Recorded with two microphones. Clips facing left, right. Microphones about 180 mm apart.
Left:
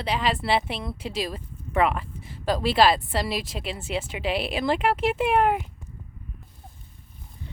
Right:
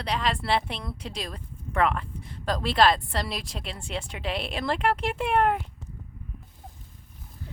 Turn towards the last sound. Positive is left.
turn(degrees=5)  # may be behind; listen again after turning